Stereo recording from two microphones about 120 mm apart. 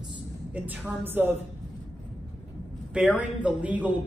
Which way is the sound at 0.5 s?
15° right (ahead or behind).